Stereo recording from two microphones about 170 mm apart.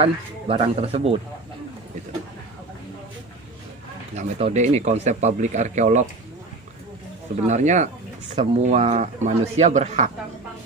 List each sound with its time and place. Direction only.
0.0 s speech: 35° right (ahead or behind)
4.1 s speech: 40° right (ahead or behind)
7.4 s speech: 45° right (ahead or behind)